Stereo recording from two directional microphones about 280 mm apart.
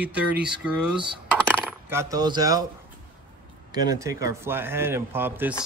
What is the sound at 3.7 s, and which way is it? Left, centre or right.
Speech, centre.